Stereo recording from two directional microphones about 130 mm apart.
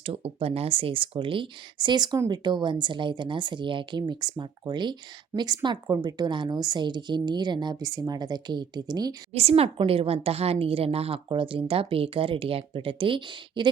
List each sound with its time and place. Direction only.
0.0 s speech: 50° right (ahead or behind); by 9.1 s 30° right (ahead or behind)
9.3 s a woman's voice: 50° right (ahead or behind)